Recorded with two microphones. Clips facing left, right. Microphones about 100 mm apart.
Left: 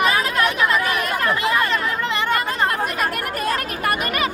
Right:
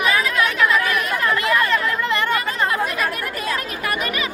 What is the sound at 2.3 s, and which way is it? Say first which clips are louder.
Chatter: even; 50° left (ahead or behind).